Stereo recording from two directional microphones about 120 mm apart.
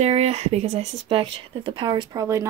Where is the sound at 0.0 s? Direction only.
65° right (ahead or behind).